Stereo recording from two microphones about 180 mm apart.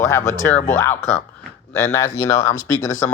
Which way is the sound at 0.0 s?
15° left (ahead or behind).